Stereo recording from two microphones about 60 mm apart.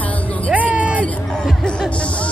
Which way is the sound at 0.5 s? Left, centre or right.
Right.